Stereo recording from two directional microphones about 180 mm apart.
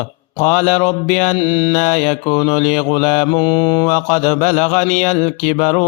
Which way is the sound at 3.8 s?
40° left (ahead or behind).